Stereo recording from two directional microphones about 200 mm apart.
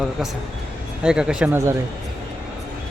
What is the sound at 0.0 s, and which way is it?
Speech, centre (ahead or behind).